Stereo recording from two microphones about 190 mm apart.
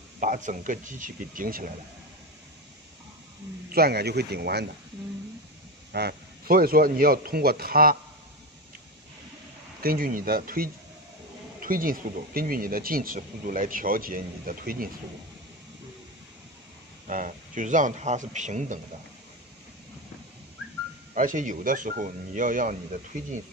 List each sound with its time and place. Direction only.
0.2 s speech: 40° right (ahead or behind)
3.7 s speech: 55° right (ahead or behind)
5.9 s speech: 55° right (ahead or behind)
9.8 s speech: 50° right (ahead or behind)
17.1 s a man's voice: 45° right (ahead or behind)
21.1 s speech: 45° right (ahead or behind)